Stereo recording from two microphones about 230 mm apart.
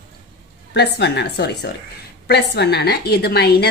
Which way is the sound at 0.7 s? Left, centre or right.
Left.